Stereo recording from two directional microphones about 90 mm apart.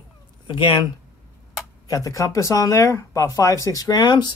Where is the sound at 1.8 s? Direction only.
40° left (ahead or behind).